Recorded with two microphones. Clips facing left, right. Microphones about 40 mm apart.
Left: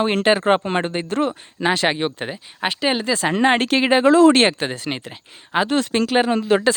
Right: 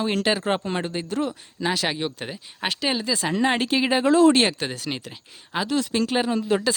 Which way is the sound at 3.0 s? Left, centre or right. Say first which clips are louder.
Left 5 dB; left.